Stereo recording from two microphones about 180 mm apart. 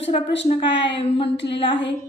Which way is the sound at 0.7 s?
80° left.